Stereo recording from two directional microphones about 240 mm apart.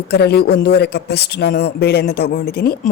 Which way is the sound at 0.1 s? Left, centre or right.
Left.